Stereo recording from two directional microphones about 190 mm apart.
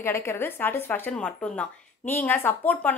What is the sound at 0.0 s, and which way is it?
Speech, 15° left (ahead or behind).